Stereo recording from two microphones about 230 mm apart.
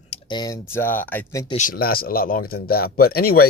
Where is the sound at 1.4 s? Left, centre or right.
Left.